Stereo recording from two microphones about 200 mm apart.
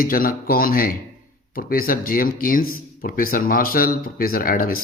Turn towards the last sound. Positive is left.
turn(degrees=45)  # may be behind; listen again after turning